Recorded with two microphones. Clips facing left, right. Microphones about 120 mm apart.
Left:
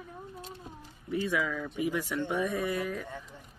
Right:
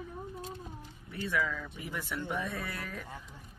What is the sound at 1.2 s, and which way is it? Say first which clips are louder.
Speech: right 1 dB; 10° left (ahead or behind).